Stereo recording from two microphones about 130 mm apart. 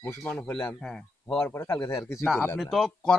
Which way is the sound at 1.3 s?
20° left (ahead or behind).